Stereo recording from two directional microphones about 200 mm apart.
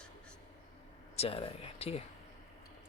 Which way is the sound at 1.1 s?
30° left (ahead or behind).